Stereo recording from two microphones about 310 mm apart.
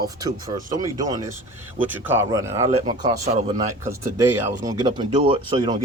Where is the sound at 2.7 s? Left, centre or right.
Right.